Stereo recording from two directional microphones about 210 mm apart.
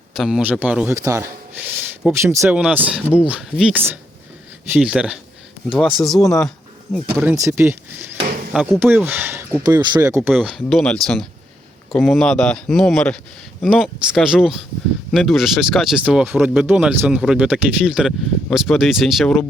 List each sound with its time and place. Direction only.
0.1 s speech: centre (ahead or behind)
6.1 s speech: 15° left (ahead or behind)
6.9 s speech: centre (ahead or behind)
7.3 s speech: 15° right (ahead or behind)
10.2 s speech: 5° right (ahead or behind)